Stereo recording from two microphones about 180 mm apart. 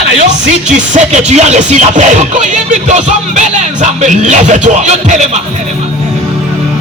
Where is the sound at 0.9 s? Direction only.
40° right (ahead or behind).